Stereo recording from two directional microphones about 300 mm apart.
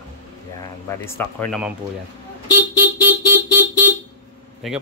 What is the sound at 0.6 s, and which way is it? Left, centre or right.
Speech, centre.